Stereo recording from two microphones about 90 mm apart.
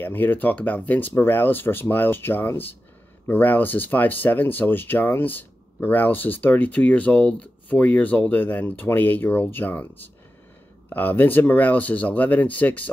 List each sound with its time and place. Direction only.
0.0 s speech: 20° left (ahead or behind)